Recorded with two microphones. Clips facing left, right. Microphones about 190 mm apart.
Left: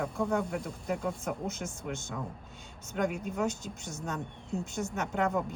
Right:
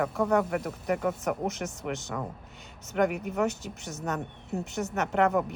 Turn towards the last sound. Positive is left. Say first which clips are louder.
# right 5 dB
turn(degrees=-70)  # may be behind; listen again after turning